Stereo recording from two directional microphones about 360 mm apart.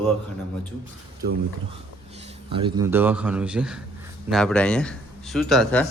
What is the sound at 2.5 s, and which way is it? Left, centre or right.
A man's voice, centre.